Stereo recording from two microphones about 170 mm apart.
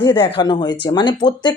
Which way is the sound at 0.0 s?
25° left (ahead or behind).